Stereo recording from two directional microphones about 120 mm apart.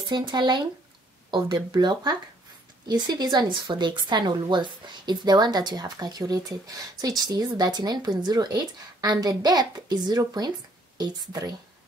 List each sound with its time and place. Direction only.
0.1 s speech: 40° right (ahead or behind)